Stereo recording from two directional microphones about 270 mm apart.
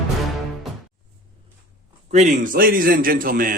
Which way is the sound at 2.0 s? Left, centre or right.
Right.